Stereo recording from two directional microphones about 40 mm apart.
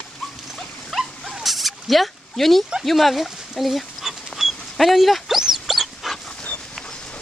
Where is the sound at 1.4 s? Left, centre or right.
Centre.